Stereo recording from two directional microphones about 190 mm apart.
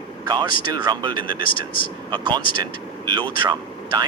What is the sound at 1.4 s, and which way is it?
Speech, 45° left (ahead or behind).